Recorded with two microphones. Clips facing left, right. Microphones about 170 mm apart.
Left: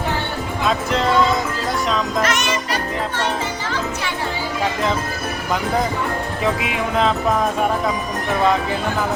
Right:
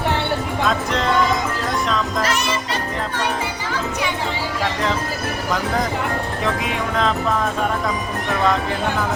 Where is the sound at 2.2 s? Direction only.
35° right (ahead or behind).